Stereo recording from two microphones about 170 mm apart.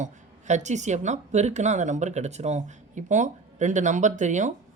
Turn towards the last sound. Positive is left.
turn(degrees=-45)  # may be behind; listen again after turning